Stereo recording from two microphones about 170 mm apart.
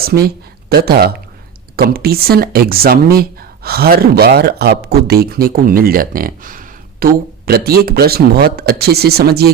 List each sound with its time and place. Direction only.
0.7 s speech: 65° right (ahead or behind)